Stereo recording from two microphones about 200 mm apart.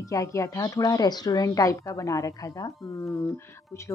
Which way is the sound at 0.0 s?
15° left (ahead or behind).